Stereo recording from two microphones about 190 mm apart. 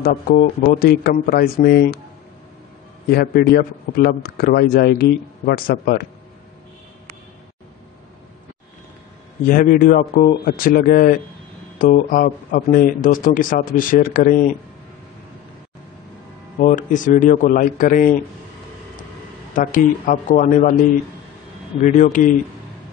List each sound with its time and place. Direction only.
0.0 s a man's voice: 50° left (ahead or behind)
3.1 s a man's voice: 55° left (ahead or behind)
9.5 s a man's voice: 45° left (ahead or behind)
16.5 s a man's voice: 45° left (ahead or behind)
19.5 s a man's voice: 45° left (ahead or behind)